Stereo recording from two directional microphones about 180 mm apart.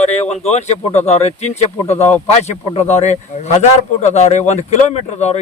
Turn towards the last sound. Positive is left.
turn(degrees=40)  # may be behind; listen again after turning